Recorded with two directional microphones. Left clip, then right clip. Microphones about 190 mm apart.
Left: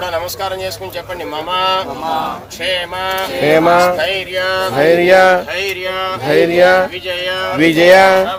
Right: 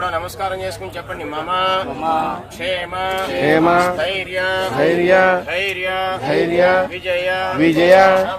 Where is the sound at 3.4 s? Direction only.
40° left (ahead or behind).